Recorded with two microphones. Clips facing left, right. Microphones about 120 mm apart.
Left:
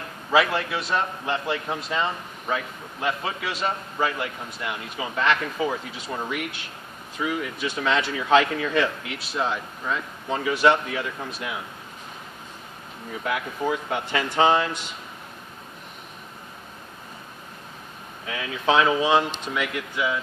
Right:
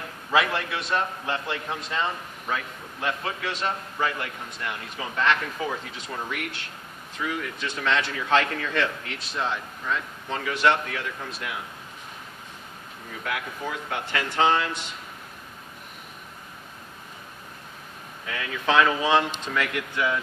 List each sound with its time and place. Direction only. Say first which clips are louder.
0.3 s a man's voice: left 3 dB; 5° left (ahead or behind)
13.2 s speech: left 5 dB; 20° left (ahead or behind)
18.2 s speech: left 3 dB; 20° left (ahead or behind)